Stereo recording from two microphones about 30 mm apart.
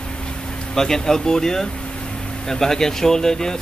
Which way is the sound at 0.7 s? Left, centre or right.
Centre.